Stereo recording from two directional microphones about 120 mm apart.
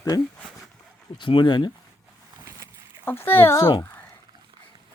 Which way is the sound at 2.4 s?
25° right (ahead or behind).